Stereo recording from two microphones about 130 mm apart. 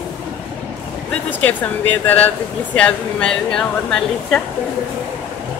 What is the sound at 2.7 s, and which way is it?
A woman's voice, 5° left (ahead or behind).